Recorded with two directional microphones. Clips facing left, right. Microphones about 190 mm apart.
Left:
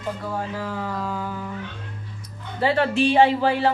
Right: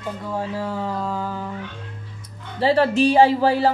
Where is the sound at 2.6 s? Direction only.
35° right (ahead or behind).